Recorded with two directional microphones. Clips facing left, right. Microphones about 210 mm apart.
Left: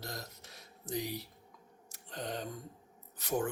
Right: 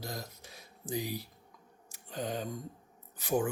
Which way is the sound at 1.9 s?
5° right (ahead or behind).